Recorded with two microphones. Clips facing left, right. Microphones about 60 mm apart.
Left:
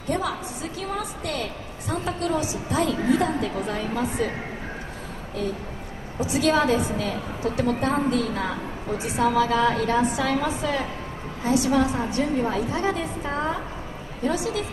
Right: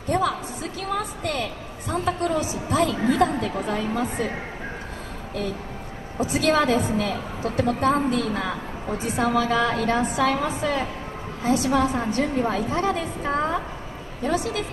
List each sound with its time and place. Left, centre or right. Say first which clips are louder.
0.1 s a woman's voice: right 3 dB; right
6.2 s a woman's voice: even; right